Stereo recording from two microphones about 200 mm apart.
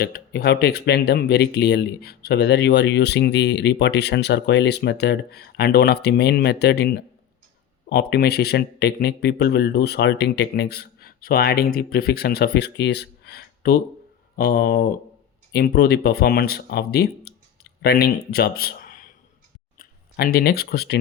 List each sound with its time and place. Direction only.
0.0 s speech: 50° left (ahead or behind)